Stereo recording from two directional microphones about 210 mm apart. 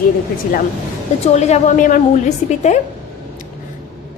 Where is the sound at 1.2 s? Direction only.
30° left (ahead or behind).